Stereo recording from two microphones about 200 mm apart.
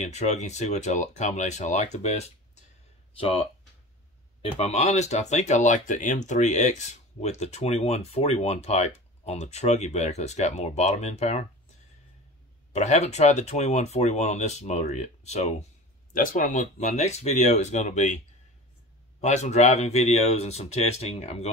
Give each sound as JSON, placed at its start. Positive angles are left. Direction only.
{"t": 0.0, "sound": "speech", "side_deg": 35}
{"t": 4.4, "sound": "speech", "side_deg": 30}
{"t": 12.7, "sound": "speech", "side_deg": 35}
{"t": 19.2, "sound": "speech", "side_deg": 35}